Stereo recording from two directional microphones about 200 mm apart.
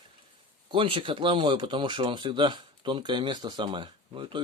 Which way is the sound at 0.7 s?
25° right (ahead or behind).